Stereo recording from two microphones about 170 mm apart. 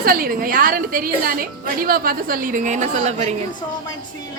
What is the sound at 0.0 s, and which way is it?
A woman's voice, 60° right (ahead or behind).